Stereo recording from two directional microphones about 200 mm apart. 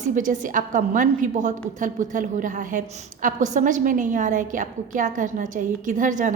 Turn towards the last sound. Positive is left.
turn(degrees=-40)  # may be behind; listen again after turning